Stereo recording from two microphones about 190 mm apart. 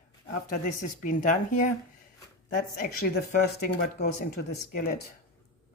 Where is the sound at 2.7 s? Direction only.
50° left (ahead or behind).